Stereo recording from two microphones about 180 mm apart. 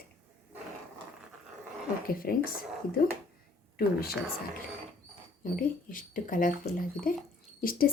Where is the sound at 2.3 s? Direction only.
55° left (ahead or behind).